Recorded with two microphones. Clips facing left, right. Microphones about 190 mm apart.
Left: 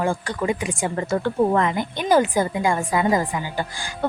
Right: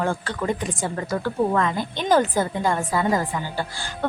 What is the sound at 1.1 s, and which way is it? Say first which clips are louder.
A woman's voice: left 3 dB; 25° left (ahead or behind).